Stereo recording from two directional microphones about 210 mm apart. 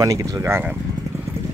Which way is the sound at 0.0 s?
15° right (ahead or behind).